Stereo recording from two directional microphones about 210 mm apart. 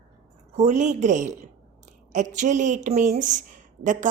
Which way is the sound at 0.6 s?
35° right (ahead or behind).